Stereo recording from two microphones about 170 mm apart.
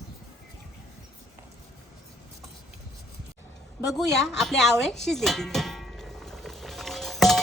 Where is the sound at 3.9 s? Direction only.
Centre (ahead or behind).